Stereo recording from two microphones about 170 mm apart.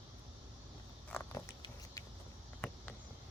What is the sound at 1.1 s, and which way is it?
Insect, 15° left (ahead or behind).